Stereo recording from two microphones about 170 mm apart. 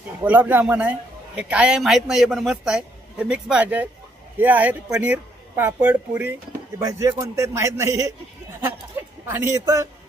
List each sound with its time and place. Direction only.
0.3 s a man's voice: 10° right (ahead or behind)